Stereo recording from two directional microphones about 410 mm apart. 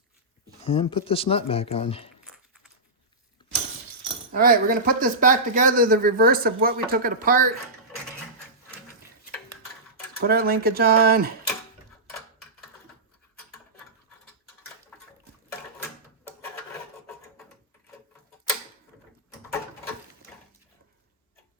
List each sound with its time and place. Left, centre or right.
0.6 s speech: centre
4.3 s speech: right
10.2 s speech: right